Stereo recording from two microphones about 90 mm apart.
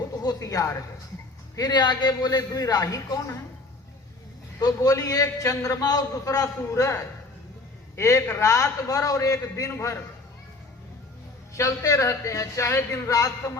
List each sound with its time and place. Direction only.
0.2 s a sound: 40° left (ahead or behind)
1.5 s a man's voice: 50° left (ahead or behind)
4.6 s a man's voice: 40° left (ahead or behind)
11.5 s a man's voice: 40° left (ahead or behind)
13.1 s a man's voice: 40° left (ahead or behind)